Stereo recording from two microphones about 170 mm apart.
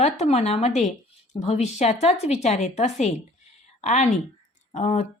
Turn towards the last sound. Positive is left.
turn(degrees=45)  # may be behind; listen again after turning